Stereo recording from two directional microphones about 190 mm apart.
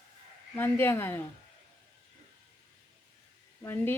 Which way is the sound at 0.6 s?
10° left (ahead or behind).